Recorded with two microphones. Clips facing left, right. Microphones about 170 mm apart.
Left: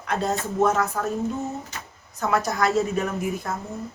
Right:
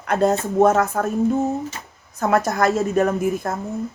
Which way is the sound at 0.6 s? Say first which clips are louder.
Right 6 dB; 50° right (ahead or behind).